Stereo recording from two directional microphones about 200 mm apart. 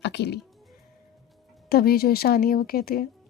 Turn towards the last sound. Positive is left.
turn(degrees=50)  # may be behind; listen again after turning